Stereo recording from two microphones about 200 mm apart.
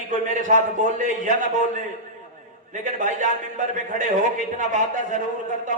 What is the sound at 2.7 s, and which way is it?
A man's voice, 40° right (ahead or behind).